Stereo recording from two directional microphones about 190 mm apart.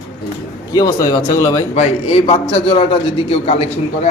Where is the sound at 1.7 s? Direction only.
30° left (ahead or behind).